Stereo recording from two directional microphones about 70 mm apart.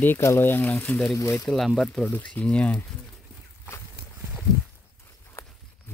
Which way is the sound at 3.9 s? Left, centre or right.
Right.